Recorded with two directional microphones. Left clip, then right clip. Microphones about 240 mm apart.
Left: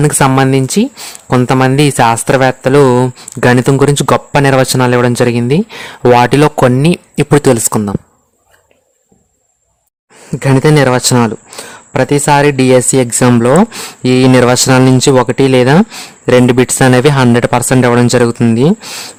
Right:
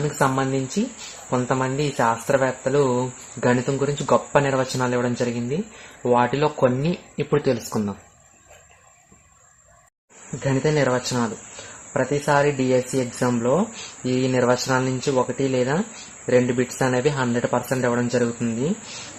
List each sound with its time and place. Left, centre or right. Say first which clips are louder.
0.2 s speech: left 10 dB; left
10.4 s speech: left 12 dB; left